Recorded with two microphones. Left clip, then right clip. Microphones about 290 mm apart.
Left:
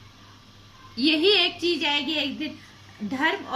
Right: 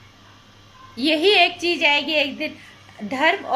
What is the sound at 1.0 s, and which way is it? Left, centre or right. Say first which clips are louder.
Speech: right 4 dB; right.